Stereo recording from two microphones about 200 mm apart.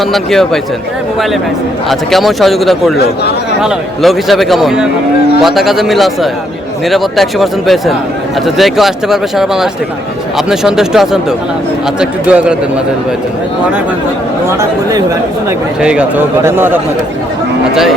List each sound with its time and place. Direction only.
0.0 s a man's voice: centre (ahead or behind)
1.9 s a man's voice: centre (ahead or behind)
14.6 s speech: 15° right (ahead or behind)
15.8 s speech: 5° right (ahead or behind)